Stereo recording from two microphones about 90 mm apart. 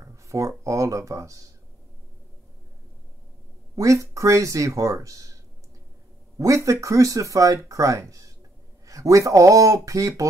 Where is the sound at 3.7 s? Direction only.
35° right (ahead or behind).